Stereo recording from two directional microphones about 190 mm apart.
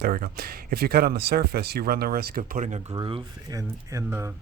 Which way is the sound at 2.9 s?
25° right (ahead or behind).